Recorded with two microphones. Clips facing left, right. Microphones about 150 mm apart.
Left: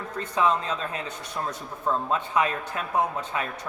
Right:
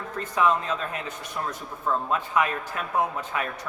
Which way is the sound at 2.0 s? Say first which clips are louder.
Even; 30° left (ahead or behind).